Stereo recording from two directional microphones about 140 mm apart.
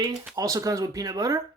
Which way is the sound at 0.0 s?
25° right (ahead or behind).